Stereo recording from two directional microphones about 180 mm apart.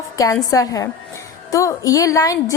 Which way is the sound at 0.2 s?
20° left (ahead or behind).